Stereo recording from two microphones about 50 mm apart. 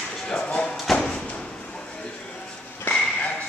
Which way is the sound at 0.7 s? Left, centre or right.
Centre.